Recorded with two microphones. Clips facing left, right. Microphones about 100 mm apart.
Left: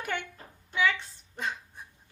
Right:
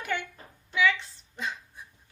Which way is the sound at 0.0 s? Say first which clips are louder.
Right 2 dB; 45° left (ahead or behind).